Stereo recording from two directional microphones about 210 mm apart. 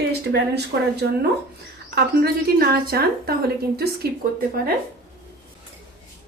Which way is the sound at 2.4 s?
45° right (ahead or behind).